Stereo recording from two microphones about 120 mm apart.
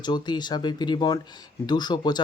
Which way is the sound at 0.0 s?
35° left (ahead or behind).